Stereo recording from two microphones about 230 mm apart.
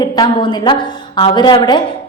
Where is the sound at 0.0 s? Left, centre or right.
Centre.